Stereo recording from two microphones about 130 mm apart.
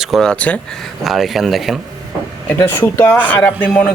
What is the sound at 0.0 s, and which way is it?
Speech, centre (ahead or behind).